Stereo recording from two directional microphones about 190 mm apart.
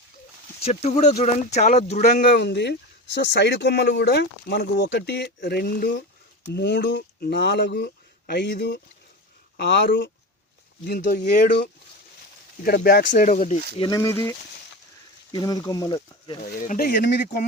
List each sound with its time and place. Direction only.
0.6 s speech: 35° left (ahead or behind)
2.2 s speech: 60° left (ahead or behind)
10.8 s speech: 55° left (ahead or behind)
13.7 s speech: 20° left (ahead or behind)
16.6 s speech: 50° left (ahead or behind)